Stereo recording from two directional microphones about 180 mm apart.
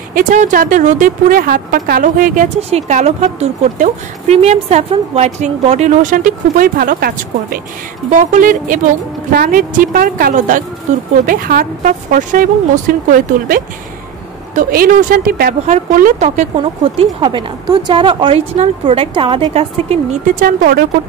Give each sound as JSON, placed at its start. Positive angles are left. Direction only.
{"t": 0.1, "sound": "a woman's voice", "side_deg": -45}
{"t": 8.1, "sound": "a woman's voice", "side_deg": -45}
{"t": 20.3, "sound": "speech", "side_deg": -55}